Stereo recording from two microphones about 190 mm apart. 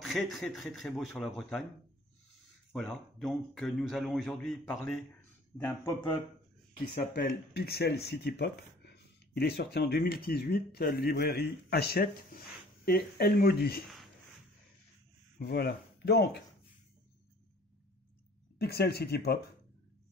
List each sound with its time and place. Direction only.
0.0 s a man's voice: centre (ahead or behind)
2.7 s a man's voice: centre (ahead or behind)
7.2 s speech: 55° left (ahead or behind)
15.3 s speech: 55° left (ahead or behind)
18.6 s speech: 60° left (ahead or behind)